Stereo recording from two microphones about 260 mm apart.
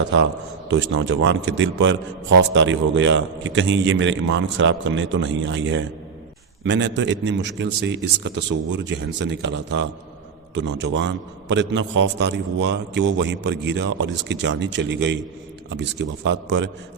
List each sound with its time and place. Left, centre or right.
0.7 s a man's voice: right